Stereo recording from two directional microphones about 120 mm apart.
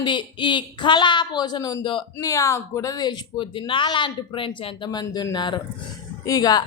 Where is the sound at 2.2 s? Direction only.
25° left (ahead or behind).